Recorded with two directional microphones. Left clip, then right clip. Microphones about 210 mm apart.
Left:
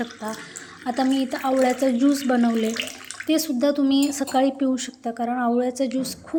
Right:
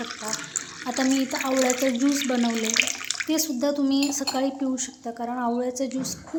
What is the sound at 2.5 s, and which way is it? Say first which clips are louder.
Speech: right 2 dB; 5° right (ahead or behind).